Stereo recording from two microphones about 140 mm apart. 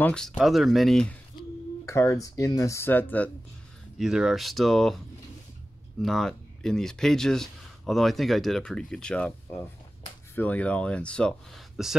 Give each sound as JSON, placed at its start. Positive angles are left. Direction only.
{"t": 0.0, "sound": "speech", "side_deg": 5}
{"t": 1.9, "sound": "speech", "side_deg": 20}
{"t": 4.0, "sound": "speech", "side_deg": -5}
{"t": 10.3, "sound": "speech", "side_deg": 10}